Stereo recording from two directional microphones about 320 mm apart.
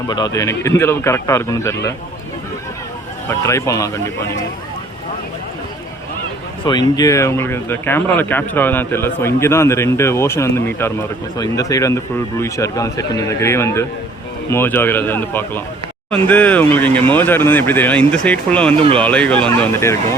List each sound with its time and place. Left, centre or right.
0.1 s speech: centre
3.2 s speech: centre
6.7 s speech: centre